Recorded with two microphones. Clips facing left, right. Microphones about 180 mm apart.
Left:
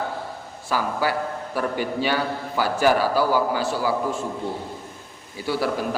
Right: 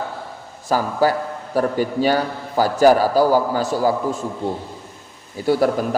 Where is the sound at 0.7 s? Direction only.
40° right (ahead or behind).